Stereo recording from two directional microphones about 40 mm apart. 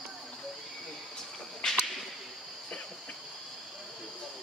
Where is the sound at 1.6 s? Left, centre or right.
Centre.